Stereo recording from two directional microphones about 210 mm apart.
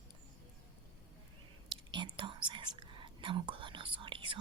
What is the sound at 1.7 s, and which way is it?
Whispering, 20° right (ahead or behind).